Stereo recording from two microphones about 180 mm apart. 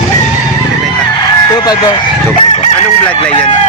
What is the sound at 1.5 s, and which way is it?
Speech, 20° left (ahead or behind).